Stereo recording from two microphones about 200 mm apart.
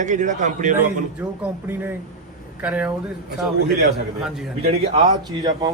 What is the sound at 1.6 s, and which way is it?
A man's voice, 10° right (ahead or behind).